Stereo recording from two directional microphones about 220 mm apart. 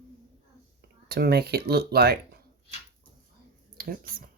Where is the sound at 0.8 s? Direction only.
45° right (ahead or behind).